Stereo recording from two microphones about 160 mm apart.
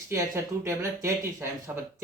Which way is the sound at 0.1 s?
15° right (ahead or behind).